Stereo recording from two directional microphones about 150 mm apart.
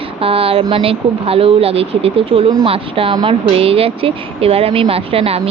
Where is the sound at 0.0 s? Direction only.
40° right (ahead or behind).